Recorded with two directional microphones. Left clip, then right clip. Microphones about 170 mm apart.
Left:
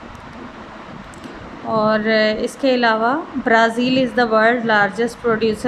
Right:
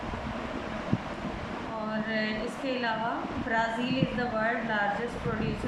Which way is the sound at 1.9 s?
75° left (ahead or behind).